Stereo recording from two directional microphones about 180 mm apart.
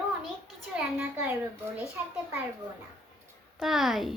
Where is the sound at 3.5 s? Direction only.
Centre (ahead or behind).